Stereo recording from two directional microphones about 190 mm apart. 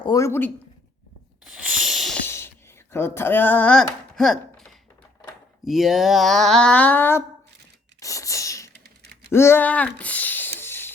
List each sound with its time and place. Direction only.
0.0 s speech: 15° left (ahead or behind)
1.5 s a sound: centre (ahead or behind)
2.2 s whispering: 10° left (ahead or behind)
2.9 s speech: 10° left (ahead or behind)
7.9 s sneeze: 15° left (ahead or behind)
9.3 s a sound: 15° left (ahead or behind)